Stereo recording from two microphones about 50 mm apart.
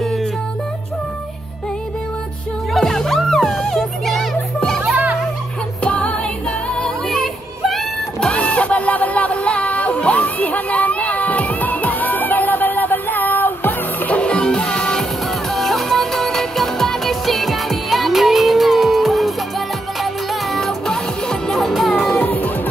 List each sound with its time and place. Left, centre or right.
0.0 s music: centre
2.7 s music: centre
4.6 s children playing: centre
5.9 s music: left
7.1 s music: centre
8.3 s music: left
14.1 s music: left
15.5 s music: centre
20.5 s music: centre
22.1 s music: left